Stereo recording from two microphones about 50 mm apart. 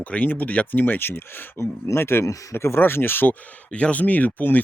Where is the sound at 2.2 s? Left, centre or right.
Left.